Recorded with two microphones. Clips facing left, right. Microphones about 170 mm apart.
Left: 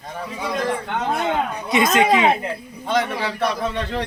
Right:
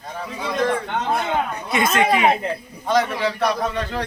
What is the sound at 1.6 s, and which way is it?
Speech, 20° left (ahead or behind).